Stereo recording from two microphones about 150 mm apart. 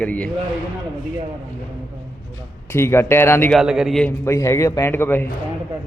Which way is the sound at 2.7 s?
15° left (ahead or behind).